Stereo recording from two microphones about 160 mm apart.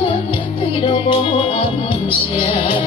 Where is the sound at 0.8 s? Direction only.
35° left (ahead or behind).